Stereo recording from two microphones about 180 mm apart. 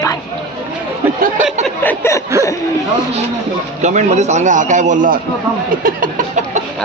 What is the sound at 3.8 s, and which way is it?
A man's voice, 40° right (ahead or behind).